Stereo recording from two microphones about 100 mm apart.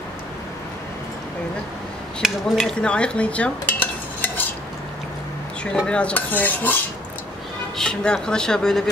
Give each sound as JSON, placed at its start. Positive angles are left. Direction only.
{"t": 2.2, "sound": "speech", "side_deg": 0}
{"t": 2.8, "sound": "stir", "side_deg": 10}
{"t": 5.9, "sound": "speech", "side_deg": 10}
{"t": 7.7, "sound": "speech", "side_deg": 5}